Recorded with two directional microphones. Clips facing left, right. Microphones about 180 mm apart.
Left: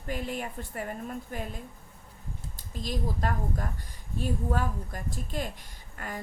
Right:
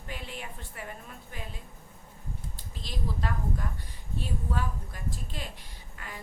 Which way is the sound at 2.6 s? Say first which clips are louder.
Left 7 dB; 45° left (ahead or behind).